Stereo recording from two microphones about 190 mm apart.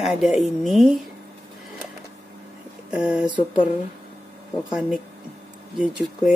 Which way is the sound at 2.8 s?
5° right (ahead or behind).